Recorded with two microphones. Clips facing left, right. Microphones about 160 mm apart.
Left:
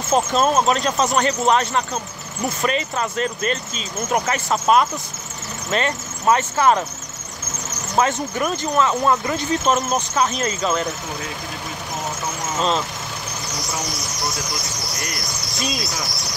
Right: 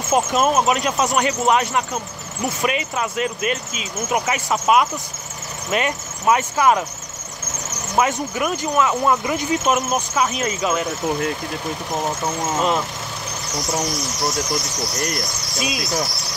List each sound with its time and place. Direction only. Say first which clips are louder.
0.1 s speech: even; 10° right (ahead or behind)
7.9 s speech: even; 10° right (ahead or behind)
12.5 s speech: even; 15° right (ahead or behind)